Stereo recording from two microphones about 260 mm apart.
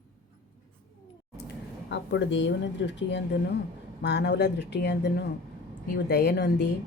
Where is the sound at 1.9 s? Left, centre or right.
Left.